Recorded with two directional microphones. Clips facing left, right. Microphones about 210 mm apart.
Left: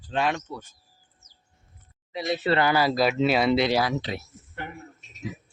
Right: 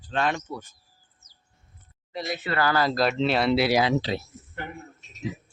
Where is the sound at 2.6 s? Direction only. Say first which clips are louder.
Right 2 dB; 10° left (ahead or behind); by 3.8 s 5° right (ahead or behind).